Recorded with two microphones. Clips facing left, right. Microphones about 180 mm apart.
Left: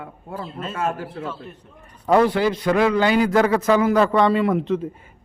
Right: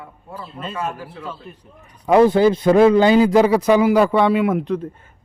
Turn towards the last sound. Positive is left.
turn(degrees=5)  # may be behind; listen again after turning